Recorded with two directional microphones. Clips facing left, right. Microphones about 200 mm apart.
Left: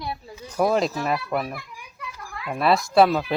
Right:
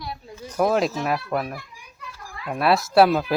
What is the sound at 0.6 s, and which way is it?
Speech, centre (ahead or behind).